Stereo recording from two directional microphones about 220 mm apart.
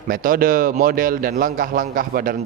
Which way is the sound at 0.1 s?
40° right (ahead or behind).